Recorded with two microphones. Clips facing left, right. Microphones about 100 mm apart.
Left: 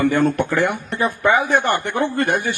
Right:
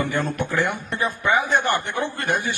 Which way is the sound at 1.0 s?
55° left (ahead or behind).